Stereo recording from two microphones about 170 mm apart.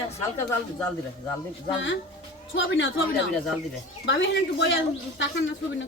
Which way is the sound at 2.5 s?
90° left.